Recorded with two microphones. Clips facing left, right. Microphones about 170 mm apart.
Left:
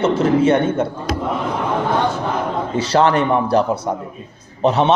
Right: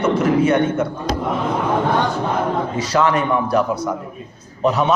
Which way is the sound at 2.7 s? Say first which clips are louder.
Left 5 dB; 30° left (ahead or behind).